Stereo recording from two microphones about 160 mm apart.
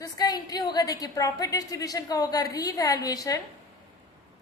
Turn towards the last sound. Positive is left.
turn(degrees=20)  # may be behind; listen again after turning